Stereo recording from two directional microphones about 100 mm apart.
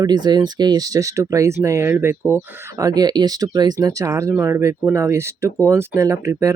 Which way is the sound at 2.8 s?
40° right (ahead or behind).